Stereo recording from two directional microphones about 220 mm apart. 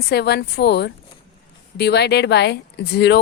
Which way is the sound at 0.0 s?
45° left (ahead or behind).